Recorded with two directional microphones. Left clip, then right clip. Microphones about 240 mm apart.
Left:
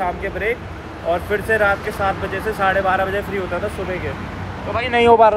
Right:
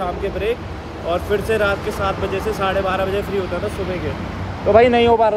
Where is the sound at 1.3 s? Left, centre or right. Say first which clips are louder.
Left 1 dB; centre.